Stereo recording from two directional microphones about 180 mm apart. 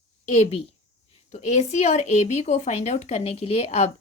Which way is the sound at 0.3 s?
40° left (ahead or behind).